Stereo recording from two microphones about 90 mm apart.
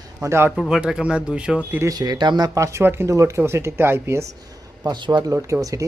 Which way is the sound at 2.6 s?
30° right (ahead or behind).